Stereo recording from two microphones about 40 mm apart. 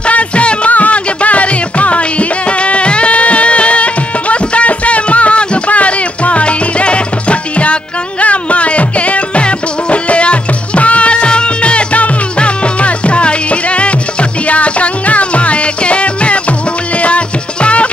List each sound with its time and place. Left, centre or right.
0.0 s music: left